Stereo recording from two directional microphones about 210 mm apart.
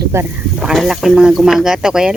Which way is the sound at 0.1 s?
10° right (ahead or behind).